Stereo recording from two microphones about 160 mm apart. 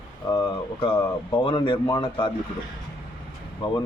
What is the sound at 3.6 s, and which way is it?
Speech, 30° left (ahead or behind).